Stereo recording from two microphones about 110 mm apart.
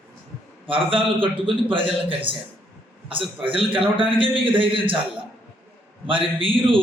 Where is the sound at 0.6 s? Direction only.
55° right (ahead or behind).